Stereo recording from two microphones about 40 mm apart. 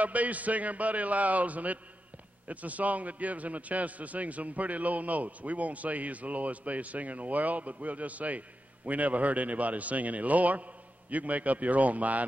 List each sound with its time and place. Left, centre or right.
0.0 s a man's voice: right